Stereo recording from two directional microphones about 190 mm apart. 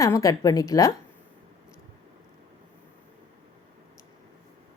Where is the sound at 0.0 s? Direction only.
15° left (ahead or behind).